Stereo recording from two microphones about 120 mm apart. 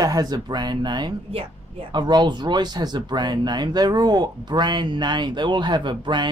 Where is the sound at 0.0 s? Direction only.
30° right (ahead or behind).